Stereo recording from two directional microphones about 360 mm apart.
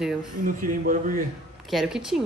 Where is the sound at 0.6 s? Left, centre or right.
Right.